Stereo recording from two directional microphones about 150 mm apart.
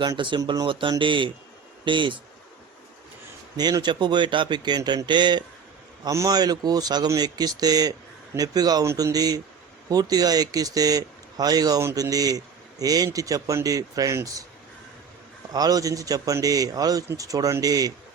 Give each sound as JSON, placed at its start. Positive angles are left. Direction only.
{"t": 0.0, "sound": "speech", "side_deg": -30}
{"t": 3.6, "sound": "speech", "side_deg": -30}
{"t": 15.5, "sound": "speech", "side_deg": -25}